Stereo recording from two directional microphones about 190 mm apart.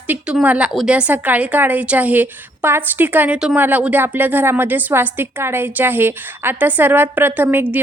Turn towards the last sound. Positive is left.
turn(degrees=-10)  # may be behind; listen again after turning